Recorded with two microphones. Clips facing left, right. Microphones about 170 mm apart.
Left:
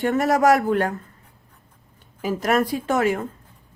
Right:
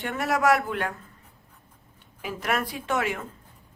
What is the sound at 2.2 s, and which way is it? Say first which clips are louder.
Speech: left 8 dB; 40° left (ahead or behind).